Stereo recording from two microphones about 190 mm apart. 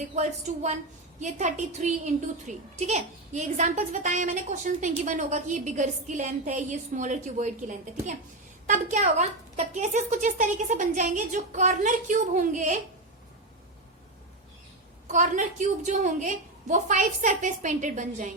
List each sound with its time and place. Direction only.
0.2 s a woman's voice: 35° right (ahead or behind)
15.0 s a woman's voice: 40° right (ahead or behind)